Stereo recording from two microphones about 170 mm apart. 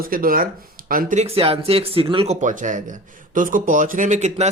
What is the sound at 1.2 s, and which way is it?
Speech, 35° right (ahead or behind).